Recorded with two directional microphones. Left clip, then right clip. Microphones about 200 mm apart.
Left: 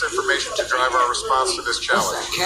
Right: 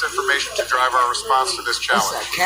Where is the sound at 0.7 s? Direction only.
15° right (ahead or behind).